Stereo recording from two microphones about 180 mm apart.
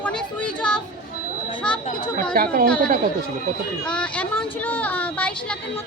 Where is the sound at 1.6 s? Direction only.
5° left (ahead or behind).